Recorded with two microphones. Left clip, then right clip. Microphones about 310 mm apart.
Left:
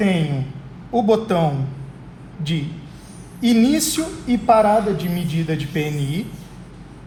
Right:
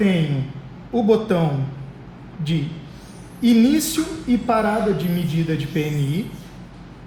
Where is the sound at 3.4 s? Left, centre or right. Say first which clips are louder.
Even; left.